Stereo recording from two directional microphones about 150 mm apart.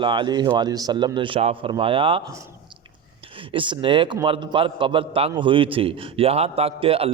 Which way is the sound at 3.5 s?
35° right (ahead or behind).